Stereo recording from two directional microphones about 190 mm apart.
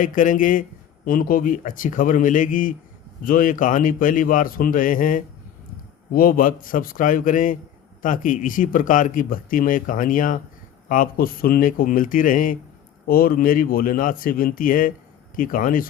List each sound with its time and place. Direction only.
0.0 s speech: 45° left (ahead or behind)